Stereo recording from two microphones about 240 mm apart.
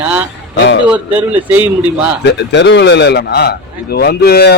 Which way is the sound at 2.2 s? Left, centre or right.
Left.